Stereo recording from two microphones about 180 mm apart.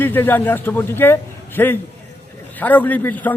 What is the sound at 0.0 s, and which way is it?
A man's voice, 10° left (ahead or behind).